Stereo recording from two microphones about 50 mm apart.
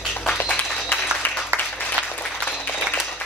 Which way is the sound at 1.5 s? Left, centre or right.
Right.